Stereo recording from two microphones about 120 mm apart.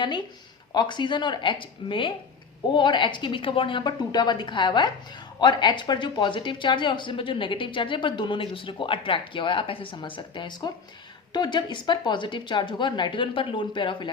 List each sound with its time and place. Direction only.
0.7 s speech: 40° left (ahead or behind)